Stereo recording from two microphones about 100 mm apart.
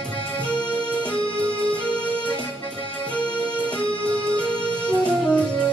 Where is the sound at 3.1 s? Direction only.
15° left (ahead or behind).